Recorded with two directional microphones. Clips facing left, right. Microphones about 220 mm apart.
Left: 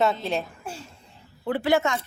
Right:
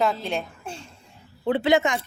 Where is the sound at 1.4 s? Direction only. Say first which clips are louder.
Right 2 dB; 20° right (ahead or behind).